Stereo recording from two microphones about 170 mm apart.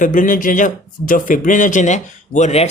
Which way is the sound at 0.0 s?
50° left (ahead or behind).